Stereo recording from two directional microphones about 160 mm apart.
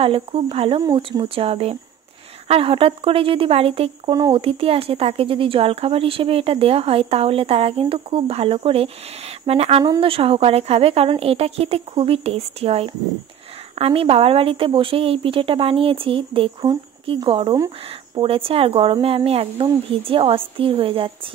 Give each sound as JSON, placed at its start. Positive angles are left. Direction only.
{"t": 0.0, "sound": "speech", "side_deg": -35}